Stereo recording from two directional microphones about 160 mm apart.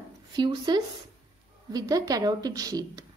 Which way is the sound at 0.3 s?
30° right (ahead or behind).